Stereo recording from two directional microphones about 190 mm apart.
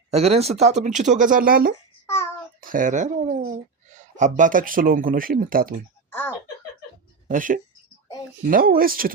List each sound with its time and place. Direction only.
0.1 s speech: 35° right (ahead or behind)
6.1 s a sound: 10° left (ahead or behind)
7.3 s speech: 45° right (ahead or behind)